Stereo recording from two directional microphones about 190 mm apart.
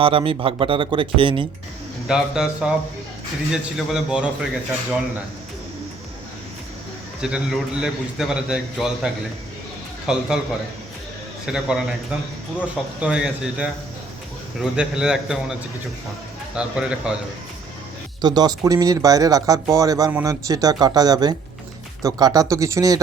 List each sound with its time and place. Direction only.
0.0 s speech: 30° right (ahead or behind)
2.0 s a man's voice: 5° right (ahead or behind)
7.2 s a man's voice: 5° right (ahead or behind)
11.4 s a man's voice: 5° right (ahead or behind)
16.6 s a man's voice: 5° right (ahead or behind)
18.2 s speech: 20° right (ahead or behind)